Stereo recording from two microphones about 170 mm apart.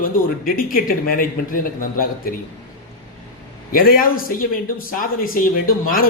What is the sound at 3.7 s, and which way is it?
A man's voice, 55° left (ahead or behind).